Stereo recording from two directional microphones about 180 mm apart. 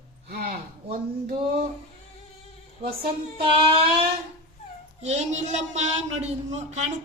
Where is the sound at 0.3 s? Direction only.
60° right (ahead or behind).